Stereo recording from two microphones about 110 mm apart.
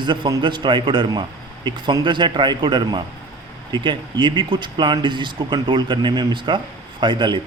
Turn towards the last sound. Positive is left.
turn(degrees=-45)  # may be behind; listen again after turning